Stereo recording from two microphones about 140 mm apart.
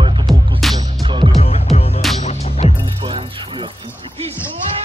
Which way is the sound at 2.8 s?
35° right (ahead or behind).